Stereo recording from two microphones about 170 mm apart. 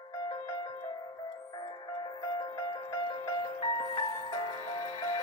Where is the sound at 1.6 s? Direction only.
25° left (ahead or behind).